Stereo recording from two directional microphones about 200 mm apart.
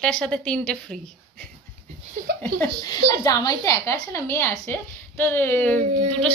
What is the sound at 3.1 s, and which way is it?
A woman's voice, 15° left (ahead or behind).